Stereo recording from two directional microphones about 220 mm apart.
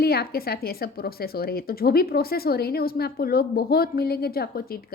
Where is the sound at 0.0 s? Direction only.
45° left (ahead or behind).